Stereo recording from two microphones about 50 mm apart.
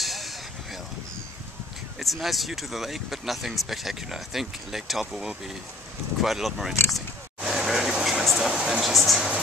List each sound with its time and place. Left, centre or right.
0.0 s vehicle: centre
2.0 s speech: centre
6.2 s speech: centre
7.4 s vehicle: centre
8.3 s a sound: centre
8.5 s a sound: centre
8.8 s speech: centre